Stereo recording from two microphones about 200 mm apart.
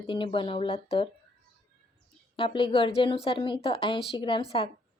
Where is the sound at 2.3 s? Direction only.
25° left (ahead or behind).